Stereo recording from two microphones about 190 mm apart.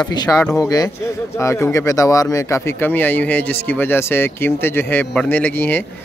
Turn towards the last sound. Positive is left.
turn(degrees=10)  # may be behind; listen again after turning